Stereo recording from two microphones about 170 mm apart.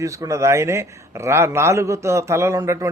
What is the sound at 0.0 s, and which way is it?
A man's voice, 20° right (ahead or behind).